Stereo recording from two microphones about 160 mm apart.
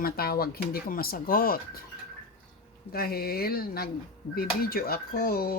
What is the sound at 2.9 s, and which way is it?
Speech, 75° left (ahead or behind).